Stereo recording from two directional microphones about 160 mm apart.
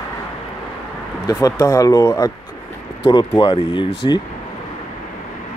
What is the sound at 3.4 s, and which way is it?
Speech, 30° left (ahead or behind).